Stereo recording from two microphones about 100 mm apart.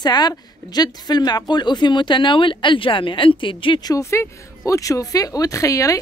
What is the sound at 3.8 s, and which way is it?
Speech, 35° left (ahead or behind).